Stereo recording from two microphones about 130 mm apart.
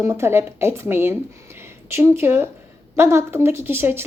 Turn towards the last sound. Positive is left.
turn(degrees=-20)  # may be behind; listen again after turning